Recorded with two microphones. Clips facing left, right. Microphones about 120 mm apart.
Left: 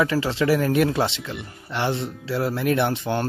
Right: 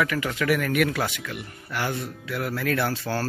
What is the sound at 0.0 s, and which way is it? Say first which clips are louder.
Speech: left 4 dB; 30° left (ahead or behind).